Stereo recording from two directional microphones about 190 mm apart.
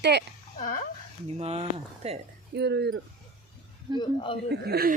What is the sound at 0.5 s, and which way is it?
Speech, 45° left (ahead or behind).